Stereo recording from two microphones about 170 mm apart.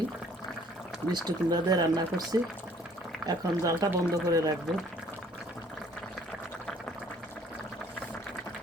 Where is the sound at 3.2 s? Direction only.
20° right (ahead or behind).